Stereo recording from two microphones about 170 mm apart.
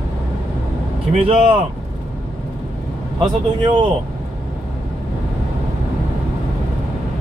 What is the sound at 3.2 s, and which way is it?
Speech, 30° right (ahead or behind).